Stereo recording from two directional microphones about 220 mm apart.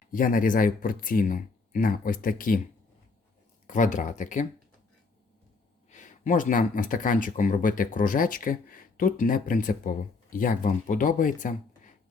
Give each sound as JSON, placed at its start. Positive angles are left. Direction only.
{"t": 0.1, "sound": "speech", "side_deg": 40}
{"t": 3.7, "sound": "speech", "side_deg": 35}
{"t": 5.9, "sound": "speech", "side_deg": 35}